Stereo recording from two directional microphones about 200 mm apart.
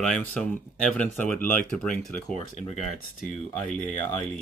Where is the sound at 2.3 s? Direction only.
35° left (ahead or behind).